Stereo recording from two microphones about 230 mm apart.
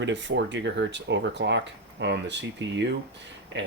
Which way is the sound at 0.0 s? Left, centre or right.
Right.